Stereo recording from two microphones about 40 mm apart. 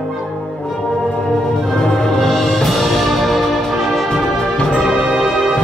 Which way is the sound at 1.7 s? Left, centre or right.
Centre.